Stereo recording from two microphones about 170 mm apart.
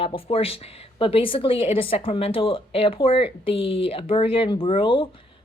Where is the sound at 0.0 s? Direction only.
35° left (ahead or behind).